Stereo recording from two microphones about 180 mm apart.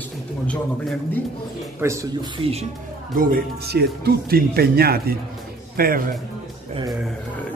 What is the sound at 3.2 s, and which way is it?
Speech, 60° right (ahead or behind).